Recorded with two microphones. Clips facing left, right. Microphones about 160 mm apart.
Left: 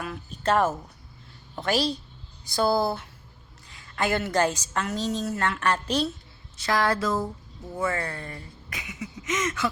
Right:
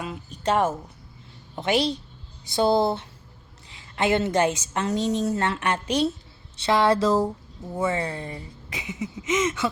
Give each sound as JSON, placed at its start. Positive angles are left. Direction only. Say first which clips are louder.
{"t": 0.0, "sound": "a woman's voice", "louder": "right 1 dB", "side_deg": -15}